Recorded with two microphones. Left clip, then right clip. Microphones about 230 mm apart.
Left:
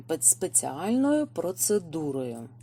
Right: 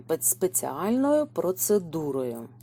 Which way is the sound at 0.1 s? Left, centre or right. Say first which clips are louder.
Right 1 dB; centre.